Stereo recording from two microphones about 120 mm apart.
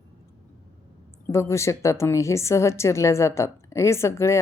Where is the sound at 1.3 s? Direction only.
25° left (ahead or behind).